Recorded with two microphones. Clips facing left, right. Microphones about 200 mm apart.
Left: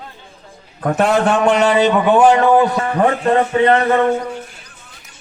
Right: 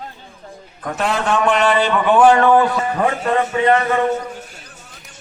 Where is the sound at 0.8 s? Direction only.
50° left (ahead or behind).